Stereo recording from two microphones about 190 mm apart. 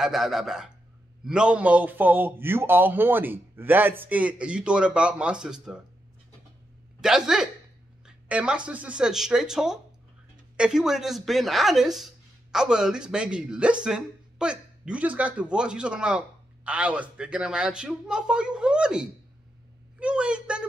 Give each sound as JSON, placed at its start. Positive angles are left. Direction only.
{"t": 0.0, "sound": "a man's voice", "side_deg": 0}
{"t": 7.0, "sound": "a woman's voice", "side_deg": -5}